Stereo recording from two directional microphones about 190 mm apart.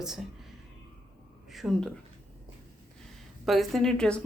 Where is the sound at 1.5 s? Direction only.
Centre (ahead or behind).